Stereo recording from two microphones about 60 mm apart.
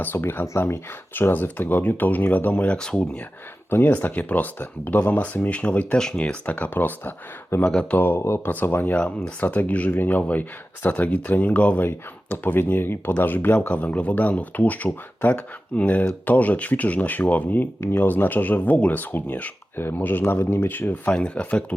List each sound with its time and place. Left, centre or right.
0.0 s speech: left
2.7 s speech: centre
3.8 s speech: left
7.7 s speech: centre
7.9 s speech: left
11.9 s speech: left
13.7 s speech: left
20.7 s speech: left
21.1 s speech: centre